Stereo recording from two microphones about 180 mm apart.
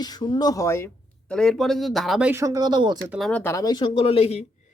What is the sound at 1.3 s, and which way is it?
Speech, 5° left (ahead or behind).